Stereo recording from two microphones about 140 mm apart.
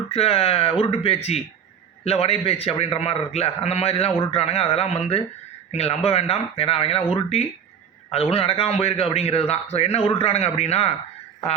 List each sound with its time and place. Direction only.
0.1 s a man's voice: 45° left (ahead or behind)